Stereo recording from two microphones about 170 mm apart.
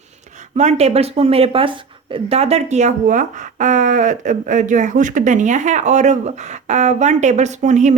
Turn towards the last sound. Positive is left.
turn(degrees=-45)  # may be behind; listen again after turning